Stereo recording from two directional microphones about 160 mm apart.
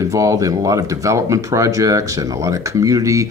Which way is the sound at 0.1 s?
20° right (ahead or behind).